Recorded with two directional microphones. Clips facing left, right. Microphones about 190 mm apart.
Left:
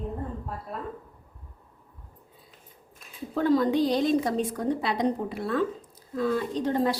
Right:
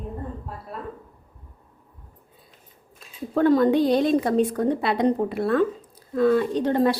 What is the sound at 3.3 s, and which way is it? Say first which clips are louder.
Speech: right 5 dB; 55° right (ahead or behind).